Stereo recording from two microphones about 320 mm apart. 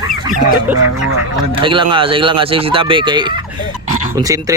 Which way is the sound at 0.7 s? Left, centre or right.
Right.